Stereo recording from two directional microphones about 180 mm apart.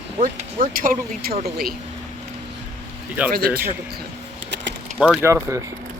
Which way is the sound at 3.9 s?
65° right (ahead or behind).